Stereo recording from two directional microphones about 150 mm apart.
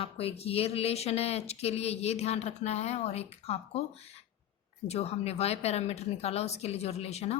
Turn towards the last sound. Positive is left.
turn(degrees=45)  # may be behind; listen again after turning